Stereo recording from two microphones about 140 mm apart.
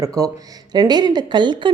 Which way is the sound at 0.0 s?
25° right (ahead or behind).